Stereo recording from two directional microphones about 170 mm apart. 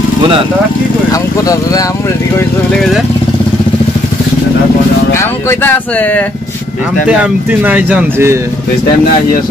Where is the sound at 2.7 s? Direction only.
Centre (ahead or behind).